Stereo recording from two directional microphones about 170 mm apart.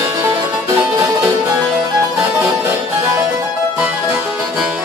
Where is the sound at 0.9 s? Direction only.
15° right (ahead or behind).